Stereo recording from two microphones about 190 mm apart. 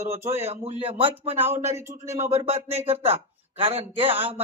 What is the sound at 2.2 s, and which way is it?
Speech, 30° right (ahead or behind).